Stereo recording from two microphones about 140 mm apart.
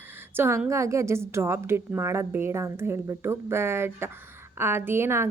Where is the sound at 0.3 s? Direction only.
15° right (ahead or behind).